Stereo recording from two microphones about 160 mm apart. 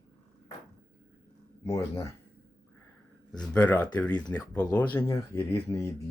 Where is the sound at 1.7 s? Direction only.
20° left (ahead or behind).